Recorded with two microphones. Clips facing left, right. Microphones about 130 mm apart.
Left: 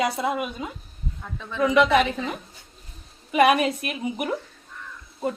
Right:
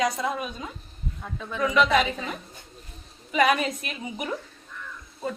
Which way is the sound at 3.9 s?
10° left (ahead or behind).